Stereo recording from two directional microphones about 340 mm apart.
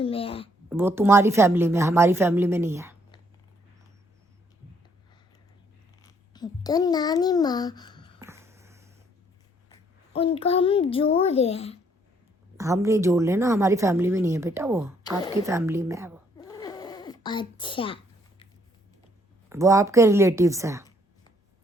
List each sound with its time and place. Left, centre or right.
0.0 s a woman's voice: centre
0.7 s a woman's voice: centre
6.0 s a child's voice: centre
8.2 s a sound: centre
9.6 s a child's voice: centre
12.5 s a woman's voice: centre
16.4 s a sound: centre
19.5 s a woman's voice: centre